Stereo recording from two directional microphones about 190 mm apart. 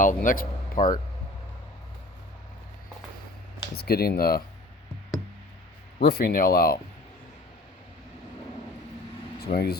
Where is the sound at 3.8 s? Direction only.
55° left (ahead or behind).